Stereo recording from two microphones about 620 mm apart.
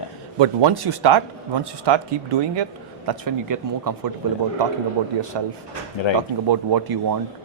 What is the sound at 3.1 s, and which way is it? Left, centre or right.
Speech, right.